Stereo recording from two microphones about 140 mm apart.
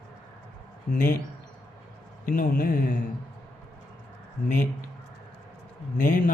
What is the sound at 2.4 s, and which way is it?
Speech, 90° left.